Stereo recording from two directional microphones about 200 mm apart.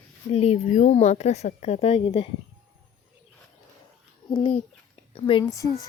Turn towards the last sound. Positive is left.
turn(degrees=15)  # may be behind; listen again after turning